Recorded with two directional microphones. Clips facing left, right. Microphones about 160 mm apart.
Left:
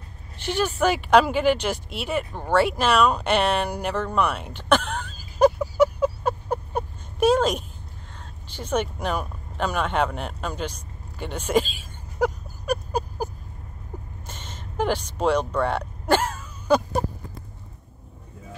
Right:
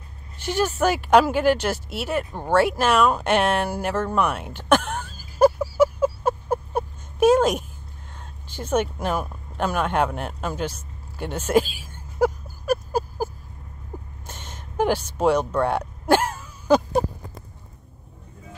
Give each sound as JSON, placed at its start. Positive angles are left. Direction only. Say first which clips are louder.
{"t": 0.7, "sound": "speech", "louder": "even", "side_deg": -10}
{"t": 14.2, "sound": "a sound", "louder": "even", "side_deg": -10}
{"t": 15.1, "sound": "speech", "louder": "right 2 dB", "side_deg": -10}